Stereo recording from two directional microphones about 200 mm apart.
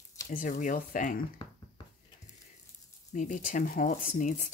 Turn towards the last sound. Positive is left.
turn(degrees=40)  # may be behind; listen again after turning